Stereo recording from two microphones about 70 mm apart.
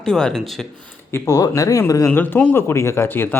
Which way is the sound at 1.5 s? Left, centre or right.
Left.